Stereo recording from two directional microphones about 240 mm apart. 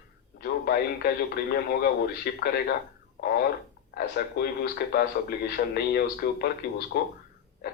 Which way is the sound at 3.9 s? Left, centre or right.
Left.